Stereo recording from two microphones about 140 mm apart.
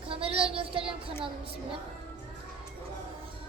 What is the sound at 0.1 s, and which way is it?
Child singing, 40° right (ahead or behind).